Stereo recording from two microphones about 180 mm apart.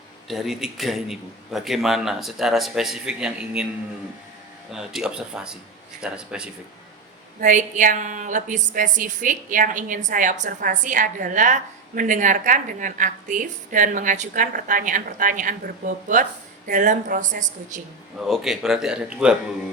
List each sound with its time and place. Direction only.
0.3 s a man's voice: centre (ahead or behind)
4.7 s a man's voice: centre (ahead or behind)
7.4 s a woman's voice: 45° right (ahead or behind)
18.2 s a man's voice: centre (ahead or behind)